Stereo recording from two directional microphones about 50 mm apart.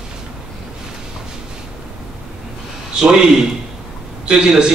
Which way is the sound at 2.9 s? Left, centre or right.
Centre.